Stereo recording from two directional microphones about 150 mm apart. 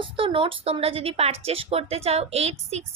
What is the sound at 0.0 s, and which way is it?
Speech, 35° right (ahead or behind).